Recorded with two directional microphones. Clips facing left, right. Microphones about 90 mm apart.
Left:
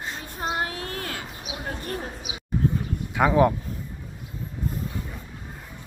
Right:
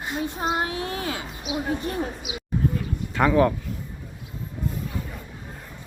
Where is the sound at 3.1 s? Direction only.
15° left (ahead or behind).